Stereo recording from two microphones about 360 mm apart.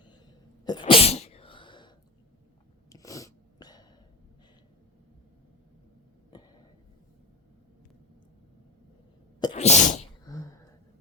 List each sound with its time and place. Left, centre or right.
0.6 s sneeze: centre
2.9 s sneeze: centre
9.4 s sneeze: centre